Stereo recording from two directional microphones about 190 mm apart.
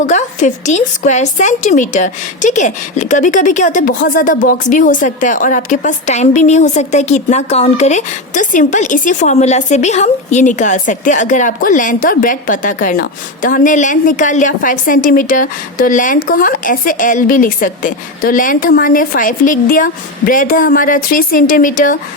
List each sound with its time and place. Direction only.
0.0 s a woman's voice: 40° left (ahead or behind)